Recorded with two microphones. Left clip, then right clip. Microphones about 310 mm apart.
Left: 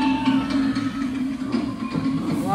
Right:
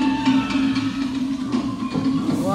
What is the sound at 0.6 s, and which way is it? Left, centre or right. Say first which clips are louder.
Music: right 2 dB; right.